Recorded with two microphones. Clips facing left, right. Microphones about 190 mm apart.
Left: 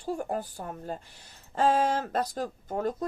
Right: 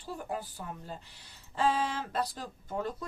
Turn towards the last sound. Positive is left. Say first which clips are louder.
# left 5 dB
turn(degrees=45)  # may be behind; listen again after turning